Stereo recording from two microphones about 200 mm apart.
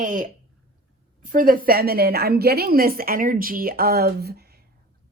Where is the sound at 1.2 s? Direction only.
45° right (ahead or behind).